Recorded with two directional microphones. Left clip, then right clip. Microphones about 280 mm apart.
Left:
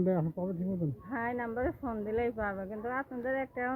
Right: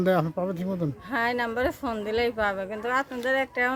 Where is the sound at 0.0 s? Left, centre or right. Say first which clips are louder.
Right 8 dB; centre.